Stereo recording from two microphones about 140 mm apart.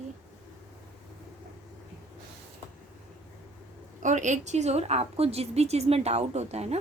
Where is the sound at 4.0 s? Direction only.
60° right (ahead or behind).